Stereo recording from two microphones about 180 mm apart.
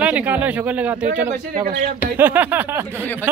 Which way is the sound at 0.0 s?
10° right (ahead or behind).